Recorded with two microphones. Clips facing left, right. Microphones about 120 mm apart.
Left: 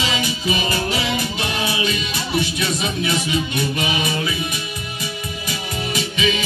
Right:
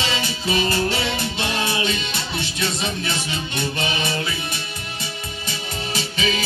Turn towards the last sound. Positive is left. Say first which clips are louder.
# left 3 dB
turn(degrees=-35)  # may be behind; listen again after turning